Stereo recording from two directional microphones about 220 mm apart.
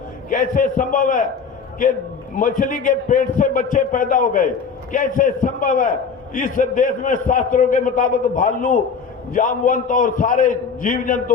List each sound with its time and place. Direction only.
0.3 s a man's voice: 40° left (ahead or behind)
2.3 s a man's voice: 35° left (ahead or behind)